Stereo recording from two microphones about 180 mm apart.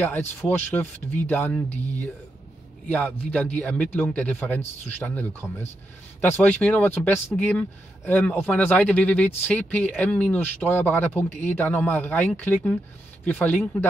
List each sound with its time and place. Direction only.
0.0 s speech: 10° left (ahead or behind)